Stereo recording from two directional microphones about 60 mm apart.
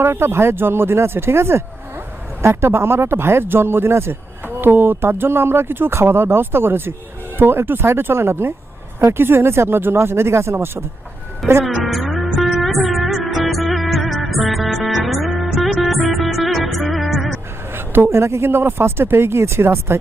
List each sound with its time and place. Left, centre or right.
0.0 s speech: right
11.7 s music: centre
17.7 s speech: right